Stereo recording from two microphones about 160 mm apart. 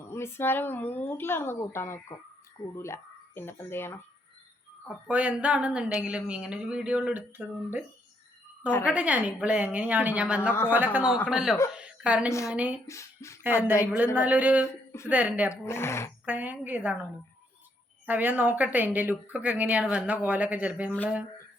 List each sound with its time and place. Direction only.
0.1 s speech: 15° left (ahead or behind)
5.0 s a man's voice: 10° right (ahead or behind)
11.7 s a sound: 5° right (ahead or behind)
12.5 s speech: 10° right (ahead or behind)
12.9 s speech: 20° left (ahead or behind)
13.4 s speech: 10° right (ahead or behind)
14.7 s speech: 15° left (ahead or behind)
15.1 s speech: 10° right (ahead or behind)
15.6 s a sound: 15° left (ahead or behind)
16.2 s speech: 10° right (ahead or behind)
18.0 s speech: 10° right (ahead or behind)